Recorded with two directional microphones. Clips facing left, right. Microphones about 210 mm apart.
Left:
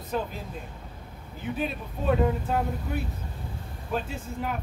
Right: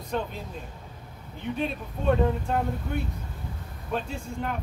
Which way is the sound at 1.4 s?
5° left (ahead or behind).